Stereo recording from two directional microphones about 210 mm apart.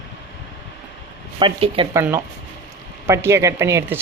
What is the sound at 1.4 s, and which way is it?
Speech, 25° right (ahead or behind).